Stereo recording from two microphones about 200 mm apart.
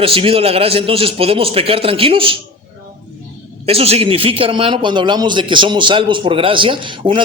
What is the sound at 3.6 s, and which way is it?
A man's voice, 30° right (ahead or behind).